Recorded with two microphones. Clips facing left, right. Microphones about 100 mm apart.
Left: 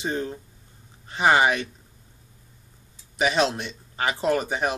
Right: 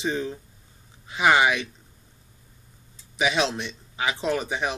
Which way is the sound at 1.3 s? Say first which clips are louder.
Left 1 dB; 45° left (ahead or behind).